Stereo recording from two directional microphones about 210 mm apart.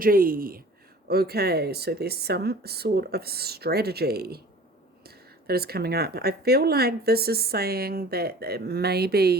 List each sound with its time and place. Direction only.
0.0 s speech: 45° right (ahead or behind)